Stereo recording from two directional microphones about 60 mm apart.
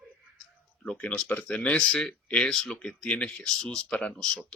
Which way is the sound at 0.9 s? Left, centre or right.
Left.